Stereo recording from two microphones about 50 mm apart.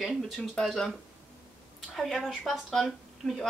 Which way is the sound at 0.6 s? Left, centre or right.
Centre.